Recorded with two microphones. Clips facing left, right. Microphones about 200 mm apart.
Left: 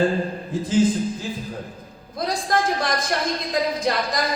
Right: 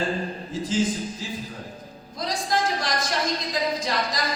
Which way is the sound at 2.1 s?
55° left (ahead or behind).